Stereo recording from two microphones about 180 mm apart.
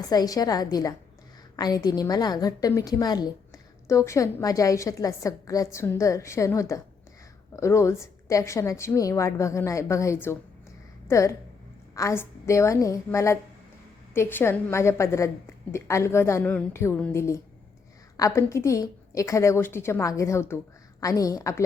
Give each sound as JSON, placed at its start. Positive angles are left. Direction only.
{"t": 0.1, "sound": "a woman's voice", "side_deg": 20}
{"t": 11.9, "sound": "a woman's voice", "side_deg": 15}